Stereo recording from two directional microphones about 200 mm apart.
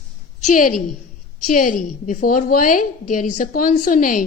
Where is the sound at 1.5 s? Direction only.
45° left (ahead or behind).